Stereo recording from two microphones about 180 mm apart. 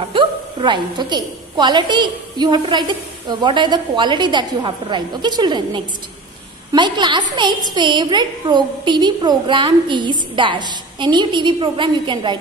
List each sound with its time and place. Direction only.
0.1 s a woman's voice: 30° right (ahead or behind)